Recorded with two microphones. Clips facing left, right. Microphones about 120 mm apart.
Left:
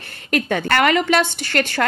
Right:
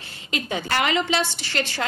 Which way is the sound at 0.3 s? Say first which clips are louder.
Left 7 dB; 55° left (ahead or behind).